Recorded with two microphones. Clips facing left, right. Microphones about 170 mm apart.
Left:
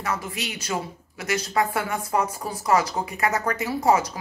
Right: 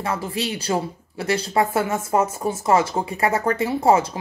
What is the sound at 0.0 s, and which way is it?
A woman's voice, 30° right (ahead or behind).